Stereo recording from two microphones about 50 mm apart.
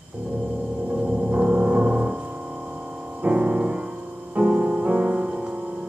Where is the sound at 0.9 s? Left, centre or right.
Right.